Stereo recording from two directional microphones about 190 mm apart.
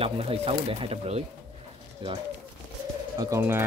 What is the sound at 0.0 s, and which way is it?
Speech, 30° right (ahead or behind).